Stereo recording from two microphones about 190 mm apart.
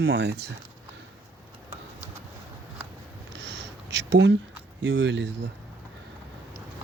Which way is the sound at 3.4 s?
65° right (ahead or behind).